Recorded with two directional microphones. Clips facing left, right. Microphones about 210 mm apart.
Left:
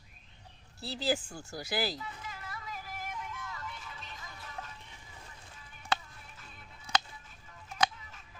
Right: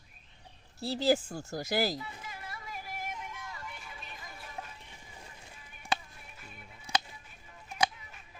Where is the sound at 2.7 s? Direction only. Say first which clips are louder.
Right 2 dB; 15° right (ahead or behind).